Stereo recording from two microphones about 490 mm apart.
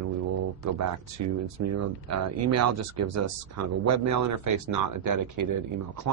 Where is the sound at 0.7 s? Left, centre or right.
Right.